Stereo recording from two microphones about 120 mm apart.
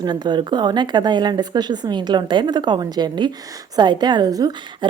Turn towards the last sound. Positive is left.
turn(degrees=-30)  # may be behind; listen again after turning